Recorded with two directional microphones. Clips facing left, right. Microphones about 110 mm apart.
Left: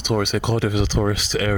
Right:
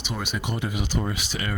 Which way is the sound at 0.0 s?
60° left (ahead or behind).